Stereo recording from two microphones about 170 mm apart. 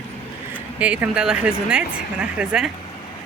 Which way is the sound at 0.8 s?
5° right (ahead or behind).